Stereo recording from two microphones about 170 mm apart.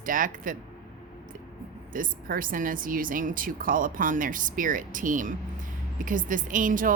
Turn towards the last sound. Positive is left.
turn(degrees=-50)  # may be behind; listen again after turning